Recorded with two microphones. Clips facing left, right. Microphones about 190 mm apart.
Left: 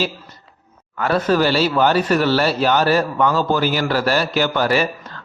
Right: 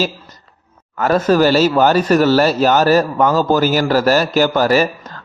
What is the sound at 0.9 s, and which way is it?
A man's voice, 45° right (ahead or behind).